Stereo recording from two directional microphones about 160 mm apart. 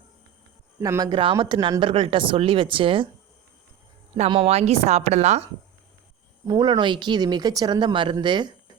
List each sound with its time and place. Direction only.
0.8 s speech: 20° right (ahead or behind)
4.3 s speech: 40° right (ahead or behind)
6.5 s speech: 30° right (ahead or behind)